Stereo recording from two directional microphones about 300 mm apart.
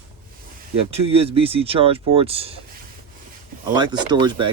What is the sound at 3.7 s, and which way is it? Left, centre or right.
Speech, centre.